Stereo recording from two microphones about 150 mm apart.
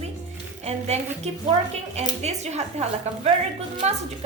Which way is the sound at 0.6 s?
45° right (ahead or behind).